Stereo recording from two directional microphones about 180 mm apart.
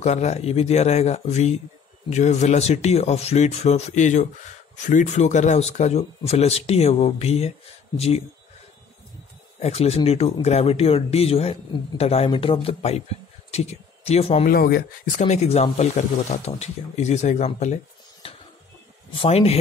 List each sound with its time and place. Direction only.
0.0 s speech: 40° left (ahead or behind)
9.6 s speech: 35° left (ahead or behind)
14.5 s speech: 55° left (ahead or behind); by 17.7 s 40° left (ahead or behind)
18.2 s a sound: 30° left (ahead or behind)
19.1 s speech: 35° left (ahead or behind)